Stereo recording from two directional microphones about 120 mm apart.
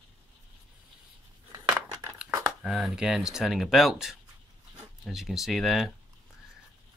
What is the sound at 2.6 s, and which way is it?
Speech, 5° right (ahead or behind).